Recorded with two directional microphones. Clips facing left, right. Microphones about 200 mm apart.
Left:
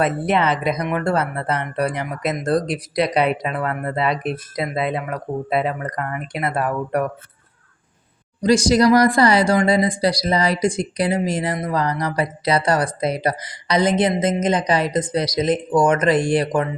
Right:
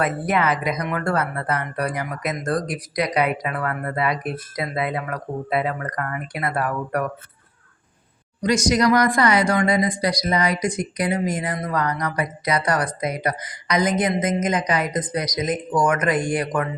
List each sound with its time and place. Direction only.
0.0 s speech: 25° left (ahead or behind)
8.4 s speech: 30° left (ahead or behind)